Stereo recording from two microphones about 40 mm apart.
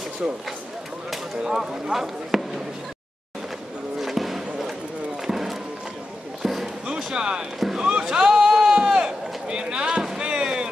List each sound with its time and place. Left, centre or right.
0.2 s speech: right
1.4 s speech: centre
4.0 s basketball bounce: centre
5.2 s run: centre
6.4 s basketball bounce: centre
7.0 s speech: centre
7.6 s speech: centre
8.0 s a sound: centre
10.1 s music: right